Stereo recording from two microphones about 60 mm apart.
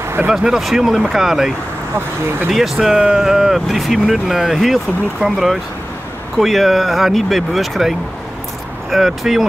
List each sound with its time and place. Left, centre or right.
0.0 s a sound: right
0.3 s speech: centre
2.5 s speech: centre
8.9 s speech: centre